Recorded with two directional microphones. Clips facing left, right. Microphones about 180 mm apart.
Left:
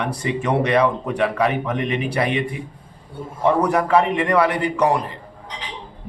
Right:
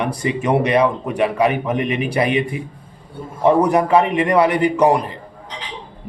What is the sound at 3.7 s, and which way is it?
A man's voice, 20° right (ahead or behind).